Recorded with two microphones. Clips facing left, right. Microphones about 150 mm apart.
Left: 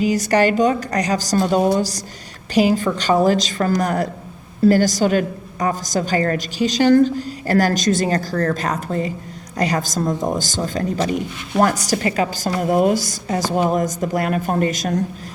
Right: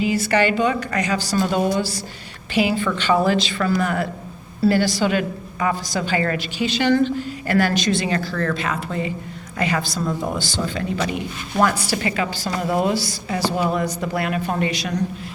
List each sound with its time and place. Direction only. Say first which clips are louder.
0.0 s a woman's voice: left 3 dB; 40° left (ahead or behind)